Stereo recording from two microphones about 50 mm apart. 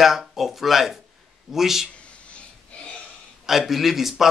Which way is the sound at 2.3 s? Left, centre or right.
Left.